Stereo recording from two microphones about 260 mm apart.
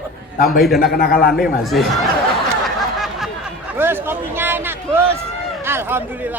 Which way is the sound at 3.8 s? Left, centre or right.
Centre.